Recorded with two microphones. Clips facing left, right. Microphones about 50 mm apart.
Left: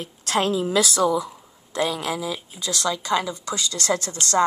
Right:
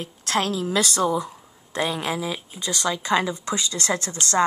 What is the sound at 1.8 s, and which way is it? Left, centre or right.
Speech, right.